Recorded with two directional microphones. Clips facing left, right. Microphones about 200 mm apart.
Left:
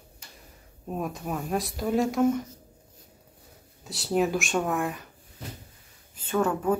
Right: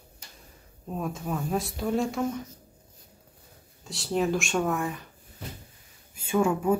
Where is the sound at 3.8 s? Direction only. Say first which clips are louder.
Left 1 dB; centre (ahead or behind).